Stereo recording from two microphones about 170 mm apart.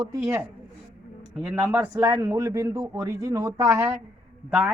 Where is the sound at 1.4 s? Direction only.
5° right (ahead or behind).